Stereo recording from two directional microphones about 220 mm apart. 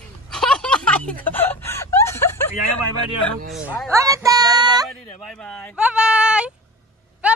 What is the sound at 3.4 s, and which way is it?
Speech, centre (ahead or behind).